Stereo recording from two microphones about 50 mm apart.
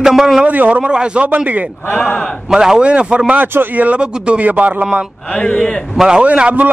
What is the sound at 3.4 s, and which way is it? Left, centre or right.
Speech, right.